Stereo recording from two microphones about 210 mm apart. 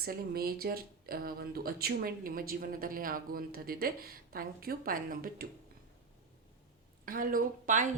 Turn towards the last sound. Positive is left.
turn(degrees=-40)  # may be behind; listen again after turning